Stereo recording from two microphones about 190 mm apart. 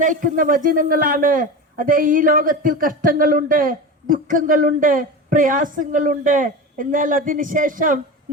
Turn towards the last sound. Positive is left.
turn(degrees=-45)  # may be behind; listen again after turning